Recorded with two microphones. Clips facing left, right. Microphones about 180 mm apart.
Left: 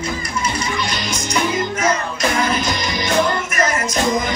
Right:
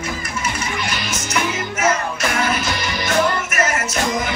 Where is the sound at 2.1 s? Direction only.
35° left (ahead or behind).